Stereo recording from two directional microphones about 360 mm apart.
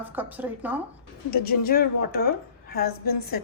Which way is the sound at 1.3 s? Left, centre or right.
Left.